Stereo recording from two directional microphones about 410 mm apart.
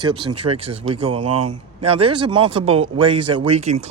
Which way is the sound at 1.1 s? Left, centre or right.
Right.